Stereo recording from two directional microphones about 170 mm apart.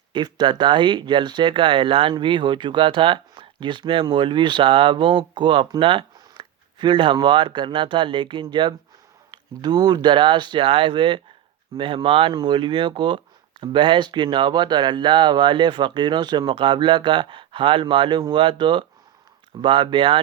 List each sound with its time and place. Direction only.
0.1 s speech: 25° right (ahead or behind)